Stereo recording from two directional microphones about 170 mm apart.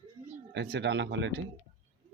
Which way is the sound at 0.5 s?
85° right.